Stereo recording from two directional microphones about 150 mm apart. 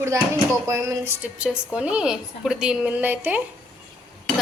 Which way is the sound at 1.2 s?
10° right (ahead or behind).